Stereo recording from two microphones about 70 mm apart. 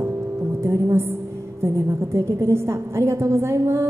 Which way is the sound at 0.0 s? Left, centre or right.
Right.